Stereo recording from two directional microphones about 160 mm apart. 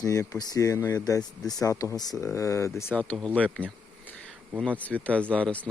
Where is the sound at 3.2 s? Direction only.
5° left (ahead or behind).